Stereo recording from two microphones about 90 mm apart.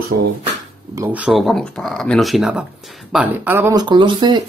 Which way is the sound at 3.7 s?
60° right (ahead or behind).